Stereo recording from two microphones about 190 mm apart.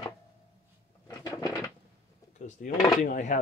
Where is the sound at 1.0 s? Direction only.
20° left (ahead or behind).